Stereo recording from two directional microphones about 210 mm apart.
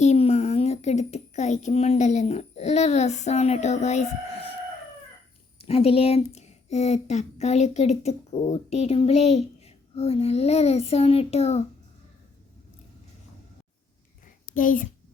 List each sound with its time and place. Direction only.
0.0 s speech: 30° left (ahead or behind)
5.5 s speech: 30° left (ahead or behind)
14.5 s speech: 40° left (ahead or behind)